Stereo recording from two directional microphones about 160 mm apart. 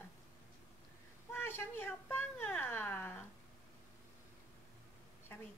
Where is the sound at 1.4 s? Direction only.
15° left (ahead or behind).